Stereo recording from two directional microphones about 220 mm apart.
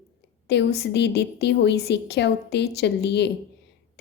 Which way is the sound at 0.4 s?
50° left (ahead or behind).